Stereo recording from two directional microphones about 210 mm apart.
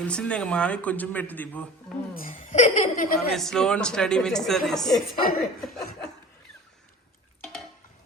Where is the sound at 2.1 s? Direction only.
40° left (ahead or behind).